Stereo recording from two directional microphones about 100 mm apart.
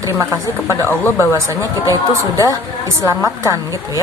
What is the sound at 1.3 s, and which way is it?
Speech, 35° right (ahead or behind).